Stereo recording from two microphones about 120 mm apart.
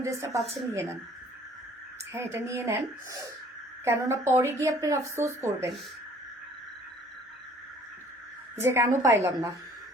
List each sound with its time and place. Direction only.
0.0 s a woman's voice: 25° right (ahead or behind)
2.1 s a woman's voice: 20° right (ahead or behind)
8.5 s a woman's voice: 20° right (ahead or behind)